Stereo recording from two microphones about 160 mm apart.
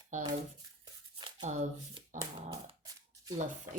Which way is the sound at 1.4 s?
45° right (ahead or behind).